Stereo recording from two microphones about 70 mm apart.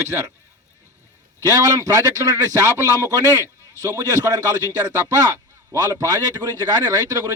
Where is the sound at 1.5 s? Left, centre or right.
Right.